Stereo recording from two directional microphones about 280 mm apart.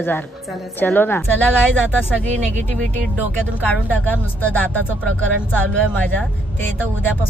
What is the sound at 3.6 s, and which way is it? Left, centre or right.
Speech, centre.